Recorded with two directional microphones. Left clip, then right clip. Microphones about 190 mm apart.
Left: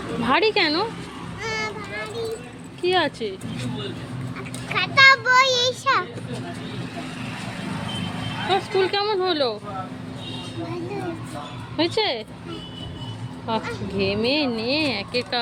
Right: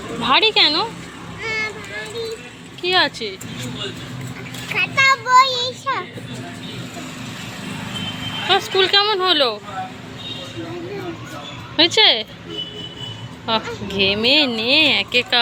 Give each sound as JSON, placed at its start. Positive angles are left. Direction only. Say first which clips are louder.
{"t": 0.2, "sound": "speech", "louder": "right 5 dB", "side_deg": 25}
{"t": 1.4, "sound": "a sound", "louder": "right 4 dB", "side_deg": 55}
{"t": 2.8, "sound": "speech", "louder": "right 4 dB", "side_deg": 20}
{"t": 4.7, "sound": "a child's voice", "louder": "left 1 dB", "side_deg": 30}
{"t": 8.4, "sound": "speech", "louder": "right 5 dB", "side_deg": 0}
{"t": 11.8, "sound": "speech", "louder": "right 9 dB", "side_deg": -5}
{"t": 13.5, "sound": "speech", "louder": "right 5 dB", "side_deg": 0}